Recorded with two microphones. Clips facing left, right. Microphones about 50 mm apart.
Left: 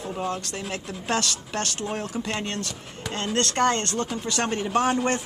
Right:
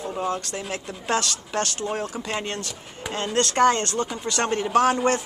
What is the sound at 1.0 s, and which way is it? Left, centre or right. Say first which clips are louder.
Speech: right 2 dB; right.